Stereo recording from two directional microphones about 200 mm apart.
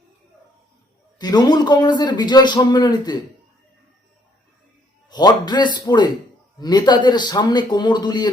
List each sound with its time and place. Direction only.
1.2 s a man's voice: 20° left (ahead or behind)
5.0 s a man's voice: 20° left (ahead or behind)